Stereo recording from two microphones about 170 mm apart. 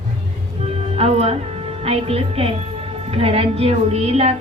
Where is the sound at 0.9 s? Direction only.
40° right (ahead or behind).